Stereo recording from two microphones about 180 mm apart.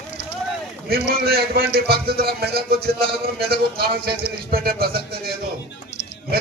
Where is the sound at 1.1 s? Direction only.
60° right (ahead or behind).